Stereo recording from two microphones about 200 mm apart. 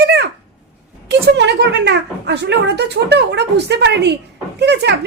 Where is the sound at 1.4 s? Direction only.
60° right (ahead or behind).